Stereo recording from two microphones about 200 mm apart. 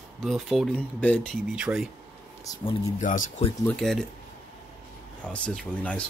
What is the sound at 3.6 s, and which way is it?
Speech, centre (ahead or behind).